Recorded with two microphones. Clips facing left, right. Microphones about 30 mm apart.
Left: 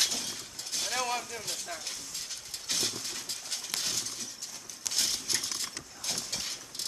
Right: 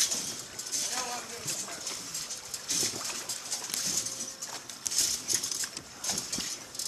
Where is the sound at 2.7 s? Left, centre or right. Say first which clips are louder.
Left 1 dB; left.